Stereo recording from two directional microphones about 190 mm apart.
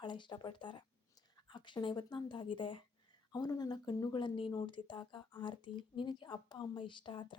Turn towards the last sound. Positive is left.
turn(degrees=25)  # may be behind; listen again after turning